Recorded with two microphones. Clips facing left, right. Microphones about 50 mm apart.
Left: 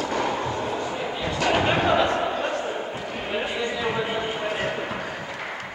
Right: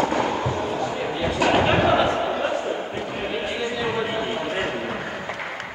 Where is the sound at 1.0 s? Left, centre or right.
Centre.